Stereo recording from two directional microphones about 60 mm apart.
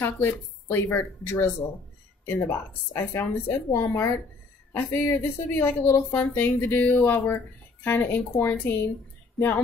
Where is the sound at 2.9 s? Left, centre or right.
Left.